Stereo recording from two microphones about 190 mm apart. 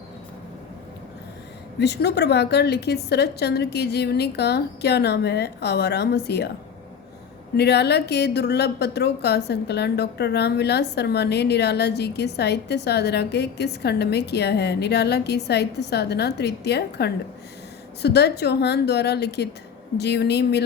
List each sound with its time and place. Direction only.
1.8 s speech: 60° left (ahead or behind)
7.5 s speech: 60° left (ahead or behind)